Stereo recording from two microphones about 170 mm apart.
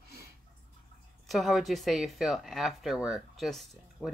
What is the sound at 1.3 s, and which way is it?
Speech, centre (ahead or behind).